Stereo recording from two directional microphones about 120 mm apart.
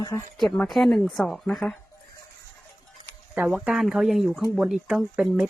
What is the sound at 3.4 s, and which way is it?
Speech, 10° right (ahead or behind).